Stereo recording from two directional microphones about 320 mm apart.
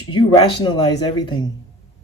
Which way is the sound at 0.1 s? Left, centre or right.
Centre.